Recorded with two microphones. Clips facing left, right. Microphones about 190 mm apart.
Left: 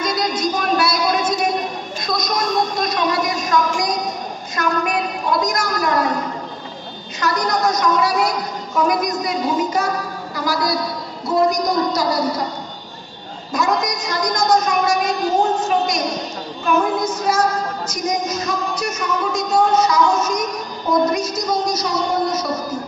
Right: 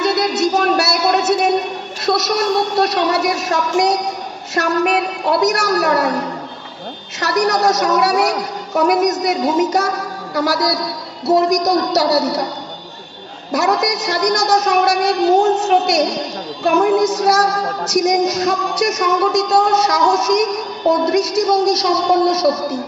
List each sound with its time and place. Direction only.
0.0 s music: 75° right (ahead or behind)
2.0 s a sound: 75° right (ahead or behind)
7.2 s music: 75° right (ahead or behind)
13.5 s music: 75° right (ahead or behind)